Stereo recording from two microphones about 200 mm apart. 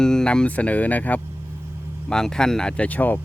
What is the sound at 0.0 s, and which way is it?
Speech, 5° left (ahead or behind).